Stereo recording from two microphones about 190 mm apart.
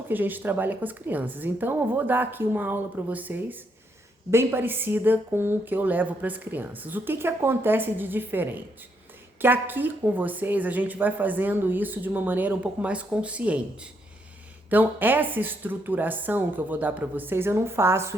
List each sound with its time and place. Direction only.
0.1 s a woman's voice: 10° right (ahead or behind)
14.7 s a woman's voice: 10° right (ahead or behind)